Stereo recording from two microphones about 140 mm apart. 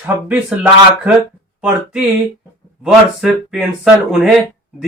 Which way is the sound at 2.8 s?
5° right (ahead or behind).